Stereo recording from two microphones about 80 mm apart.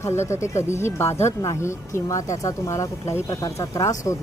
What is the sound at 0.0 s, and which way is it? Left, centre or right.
Speech, left.